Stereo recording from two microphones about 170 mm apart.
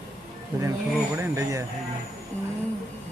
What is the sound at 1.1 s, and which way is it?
Speech, 15° right (ahead or behind).